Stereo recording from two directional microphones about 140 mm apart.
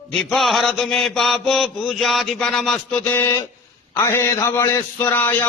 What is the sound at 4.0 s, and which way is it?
A man's voice, 20° left (ahead or behind).